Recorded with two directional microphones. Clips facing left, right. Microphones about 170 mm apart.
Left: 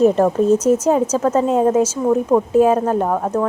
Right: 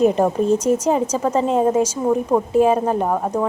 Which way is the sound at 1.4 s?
5° left (ahead or behind).